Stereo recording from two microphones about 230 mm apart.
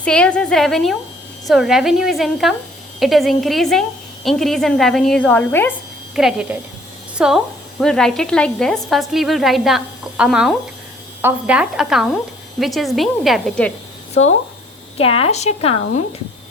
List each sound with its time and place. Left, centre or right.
0.0 s a woman's voice: centre
6.1 s a woman's voice: centre
14.9 s a woman's voice: left